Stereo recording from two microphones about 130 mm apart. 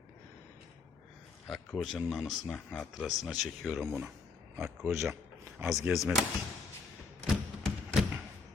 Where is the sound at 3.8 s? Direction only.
15° right (ahead or behind).